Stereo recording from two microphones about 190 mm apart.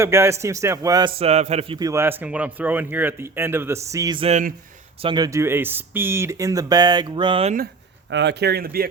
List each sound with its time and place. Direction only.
0.0 s speech: 15° right (ahead or behind)
1.2 s a man's voice: 35° right (ahead or behind)
1.9 s speech: 10° right (ahead or behind)
4.2 s a man's voice: 40° right (ahead or behind)
5.0 s speech: 20° right (ahead or behind)
8.1 s speech: 65° right (ahead or behind)